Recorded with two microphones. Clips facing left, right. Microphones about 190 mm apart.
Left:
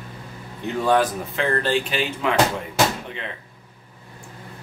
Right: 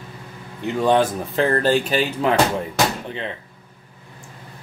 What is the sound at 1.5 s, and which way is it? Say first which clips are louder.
Speech: right 3 dB; 40° right (ahead or behind).